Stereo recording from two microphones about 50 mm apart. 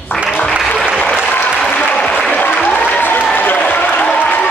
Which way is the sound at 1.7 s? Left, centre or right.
Left.